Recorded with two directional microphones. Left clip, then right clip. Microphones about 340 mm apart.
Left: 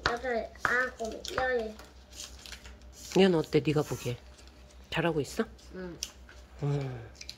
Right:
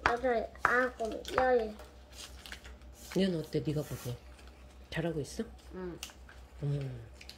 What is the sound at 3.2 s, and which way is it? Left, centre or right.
Speech, centre.